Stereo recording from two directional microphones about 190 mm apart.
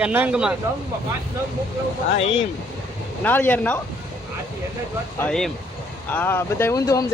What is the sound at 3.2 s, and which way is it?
Speech, 10° left (ahead or behind).